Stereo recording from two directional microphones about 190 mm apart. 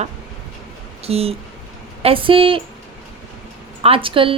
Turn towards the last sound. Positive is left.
turn(degrees=-25)  # may be behind; listen again after turning